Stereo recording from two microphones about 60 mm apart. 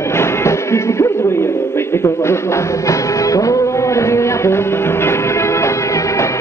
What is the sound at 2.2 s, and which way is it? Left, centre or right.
Music, left.